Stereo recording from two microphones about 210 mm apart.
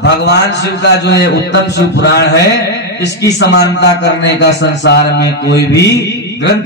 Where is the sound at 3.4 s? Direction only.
55° left (ahead or behind).